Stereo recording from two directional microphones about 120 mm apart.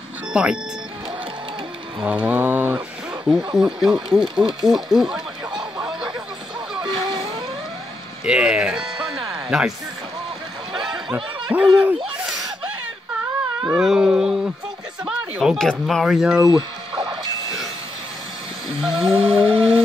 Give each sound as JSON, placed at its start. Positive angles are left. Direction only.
{"t": 0.3, "sound": "speech", "side_deg": -5}
{"t": 2.0, "sound": "mantra", "side_deg": -10}
{"t": 3.3, "sound": "speech", "side_deg": -5}
{"t": 4.6, "sound": "a sound", "side_deg": -5}
{"t": 6.8, "sound": "vehicle", "side_deg": -40}
{"t": 8.3, "sound": "mantra", "side_deg": -10}
{"t": 9.5, "sound": "speech", "side_deg": -5}
{"t": 10.8, "sound": "a sound", "side_deg": -5}
{"t": 11.5, "sound": "mantra", "side_deg": -15}
{"t": 13.7, "sound": "mantra", "side_deg": -5}
{"t": 15.0, "sound": "speech", "side_deg": -5}
{"t": 16.4, "sound": "a sound", "side_deg": -40}
{"t": 18.8, "sound": "a sound", "side_deg": -45}